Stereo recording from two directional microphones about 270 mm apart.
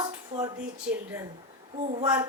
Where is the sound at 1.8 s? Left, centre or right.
Right.